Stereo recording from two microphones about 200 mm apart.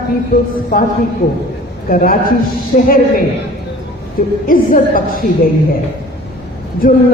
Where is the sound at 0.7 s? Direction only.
45° left (ahead or behind).